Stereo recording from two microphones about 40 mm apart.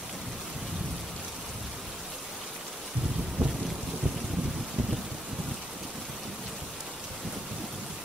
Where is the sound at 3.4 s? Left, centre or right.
Right.